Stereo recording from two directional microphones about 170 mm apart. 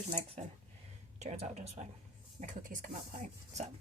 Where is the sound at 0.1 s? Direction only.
40° right (ahead or behind).